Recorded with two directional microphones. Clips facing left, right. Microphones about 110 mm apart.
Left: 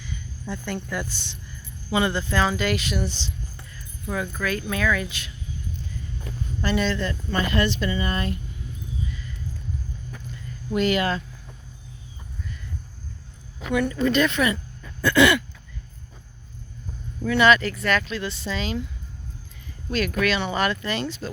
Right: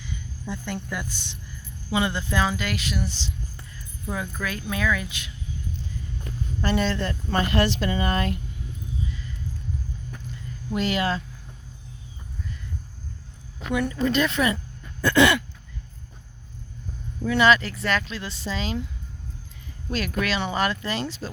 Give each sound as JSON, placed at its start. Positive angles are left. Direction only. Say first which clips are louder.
{"t": 0.5, "sound": "speech", "louder": "left 2 dB", "side_deg": -15}
{"t": 2.5, "sound": "speech", "louder": "left 4 dB", "side_deg": 0}
{"t": 4.1, "sound": "speech", "louder": "left 3 dB", "side_deg": -20}
{"t": 6.6, "sound": "speech", "louder": "even", "side_deg": -45}
{"t": 10.8, "sound": "speech", "louder": "left 3 dB", "side_deg": -25}
{"t": 13.7, "sound": "speech", "louder": "left 2 dB", "side_deg": -15}
{"t": 14.1, "sound": "speech", "louder": "left 1 dB", "side_deg": -25}
{"t": 17.2, "sound": "speech", "louder": "left 1 dB", "side_deg": -25}
{"t": 19.9, "sound": "speech", "louder": "left 3 dB", "side_deg": -30}